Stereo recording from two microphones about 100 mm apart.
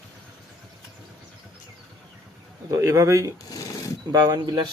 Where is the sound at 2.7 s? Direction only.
35° right (ahead or behind).